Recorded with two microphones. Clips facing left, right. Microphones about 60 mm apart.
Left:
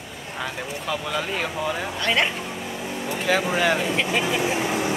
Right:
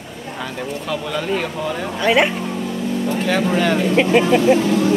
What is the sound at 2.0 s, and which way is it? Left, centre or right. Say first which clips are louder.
Speech: right 8 dB; centre.